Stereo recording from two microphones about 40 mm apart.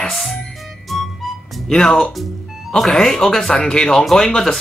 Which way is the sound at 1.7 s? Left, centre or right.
Centre.